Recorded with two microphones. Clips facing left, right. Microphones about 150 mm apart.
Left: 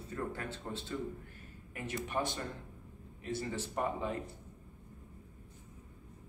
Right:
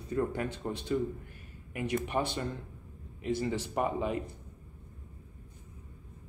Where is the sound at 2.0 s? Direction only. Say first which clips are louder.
Right 3 dB; 70° right (ahead or behind).